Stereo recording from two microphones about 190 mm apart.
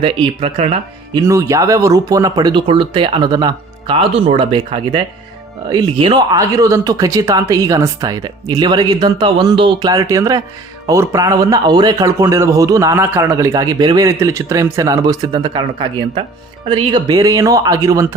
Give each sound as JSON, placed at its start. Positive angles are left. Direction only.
{"t": 0.0, "sound": "speech", "side_deg": -30}
{"t": 1.3, "sound": "speech", "side_deg": -15}